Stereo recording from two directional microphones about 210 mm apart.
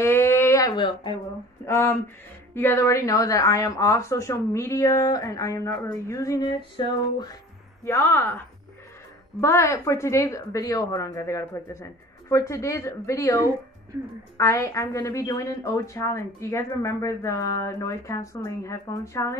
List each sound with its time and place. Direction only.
0.0 s a sound: 10° left (ahead or behind)
1.7 s a woman's voice: 10° left (ahead or behind)
9.4 s a woman's voice: 15° left (ahead or behind)